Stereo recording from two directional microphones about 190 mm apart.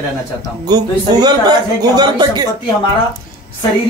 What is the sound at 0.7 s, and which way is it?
Speech, 20° right (ahead or behind).